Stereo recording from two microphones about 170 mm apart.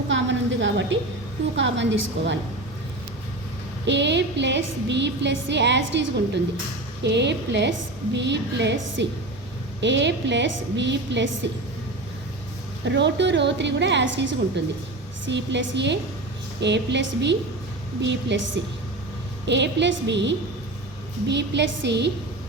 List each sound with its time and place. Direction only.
0.1 s a sound: 90° right
1.5 s a woman's voice: 90° right
3.8 s a woman's voice: 90° right
12.8 s a woman's voice: 90° right